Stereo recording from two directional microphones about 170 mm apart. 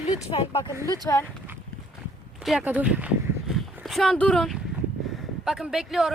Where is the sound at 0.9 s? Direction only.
20° left (ahead or behind).